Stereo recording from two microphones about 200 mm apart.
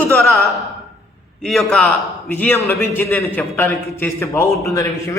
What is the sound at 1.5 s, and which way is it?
A man's voice, centre (ahead or behind).